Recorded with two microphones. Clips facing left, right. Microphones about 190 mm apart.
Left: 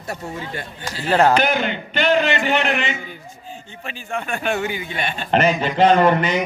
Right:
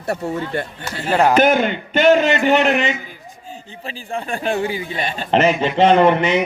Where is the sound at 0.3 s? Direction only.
60° right (ahead or behind).